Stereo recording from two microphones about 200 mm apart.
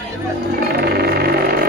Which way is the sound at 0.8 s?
50° right (ahead or behind).